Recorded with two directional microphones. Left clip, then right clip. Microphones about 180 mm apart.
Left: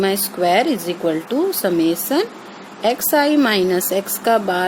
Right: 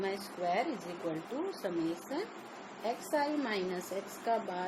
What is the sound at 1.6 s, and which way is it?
Speech, 55° left (ahead or behind).